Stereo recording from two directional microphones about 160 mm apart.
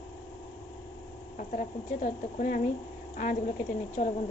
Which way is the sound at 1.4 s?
50° left (ahead or behind).